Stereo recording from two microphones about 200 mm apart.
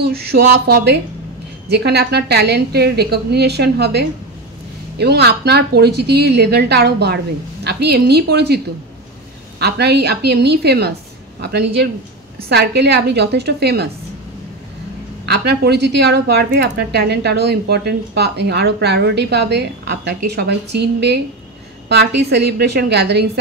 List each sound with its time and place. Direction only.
0.0 s a woman's voice: 50° right (ahead or behind)
9.6 s a woman's voice: 55° right (ahead or behind)
15.2 s a woman's voice: 55° right (ahead or behind)